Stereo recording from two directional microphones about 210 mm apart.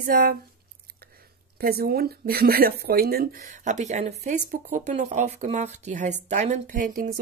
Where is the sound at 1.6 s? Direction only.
45° right (ahead or behind).